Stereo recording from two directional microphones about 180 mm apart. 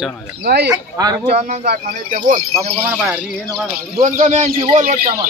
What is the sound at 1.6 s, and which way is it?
Speech, 55° right (ahead or behind).